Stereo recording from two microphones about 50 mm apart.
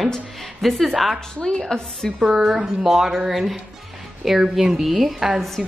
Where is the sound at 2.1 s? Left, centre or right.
Centre.